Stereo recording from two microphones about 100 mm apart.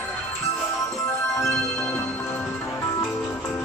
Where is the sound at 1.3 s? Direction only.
30° left (ahead or behind).